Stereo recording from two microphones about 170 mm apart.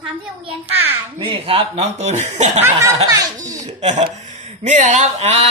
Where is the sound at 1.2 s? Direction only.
30° right (ahead or behind).